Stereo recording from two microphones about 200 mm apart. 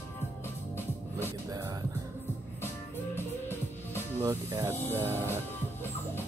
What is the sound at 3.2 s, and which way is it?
Music, 10° left (ahead or behind).